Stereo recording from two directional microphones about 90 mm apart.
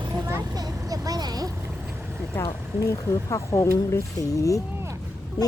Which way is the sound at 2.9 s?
35° left (ahead or behind).